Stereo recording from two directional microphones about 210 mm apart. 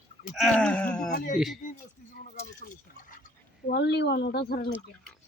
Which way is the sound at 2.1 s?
40° left (ahead or behind).